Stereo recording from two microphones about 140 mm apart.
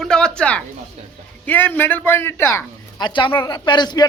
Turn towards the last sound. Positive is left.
turn(degrees=30)  # may be behind; listen again after turning